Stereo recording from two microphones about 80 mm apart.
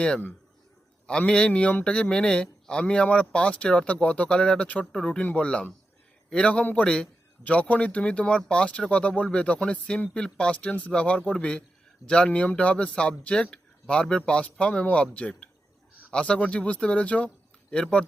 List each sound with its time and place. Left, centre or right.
1.2 s speech: centre